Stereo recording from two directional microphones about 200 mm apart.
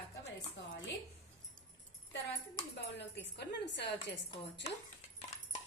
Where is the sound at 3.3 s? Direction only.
60° left (ahead or behind).